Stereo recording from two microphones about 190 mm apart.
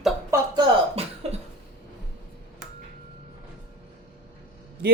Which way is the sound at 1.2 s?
35° right (ahead or behind).